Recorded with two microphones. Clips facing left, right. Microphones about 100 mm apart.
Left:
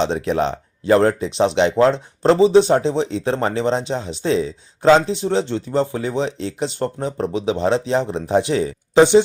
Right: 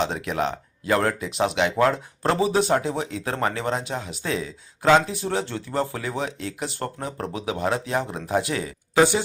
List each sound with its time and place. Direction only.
0.0 s speech: 25° left (ahead or behind)